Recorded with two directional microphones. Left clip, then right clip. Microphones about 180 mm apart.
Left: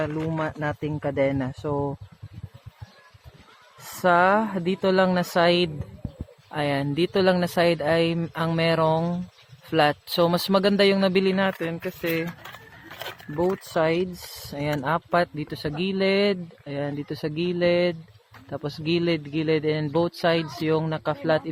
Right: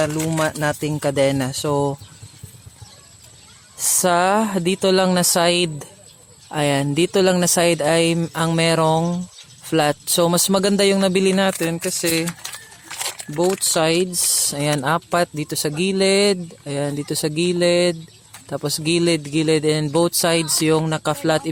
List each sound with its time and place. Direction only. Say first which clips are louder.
0.0 s speech: right 7 dB; 65° right (ahead or behind)
4.0 s speech: right 2 dB; 70° right (ahead or behind); by 12.3 s 90° right
13.7 s speech: right 3 dB; 65° right (ahead or behind)